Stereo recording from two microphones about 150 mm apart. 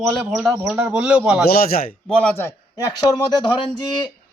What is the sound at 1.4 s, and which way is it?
Speech, 80° left.